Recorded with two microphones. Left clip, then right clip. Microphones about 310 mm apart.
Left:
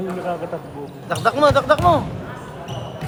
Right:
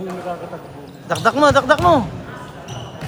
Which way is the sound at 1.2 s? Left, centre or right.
Right.